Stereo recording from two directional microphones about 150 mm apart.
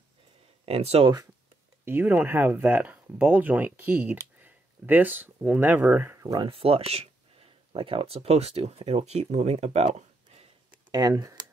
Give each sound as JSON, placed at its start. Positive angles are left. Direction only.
{"t": 0.7, "sound": "speech", "side_deg": -45}
{"t": 1.9, "sound": "speech", "side_deg": -15}
{"t": 6.2, "sound": "speech", "side_deg": -30}
{"t": 10.9, "sound": "speech", "side_deg": -25}